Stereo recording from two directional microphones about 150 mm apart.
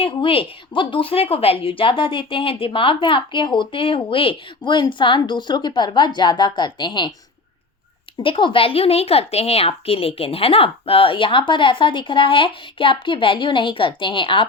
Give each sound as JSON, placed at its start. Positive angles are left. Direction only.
{"t": 0.0, "sound": "a woman's voice", "side_deg": 35}
{"t": 8.2, "sound": "a woman's voice", "side_deg": 35}